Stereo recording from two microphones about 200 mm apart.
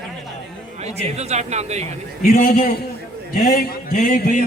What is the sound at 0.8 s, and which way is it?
A man's voice, 35° right (ahead or behind).